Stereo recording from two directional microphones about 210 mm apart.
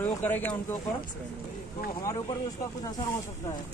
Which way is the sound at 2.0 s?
15° left (ahead or behind).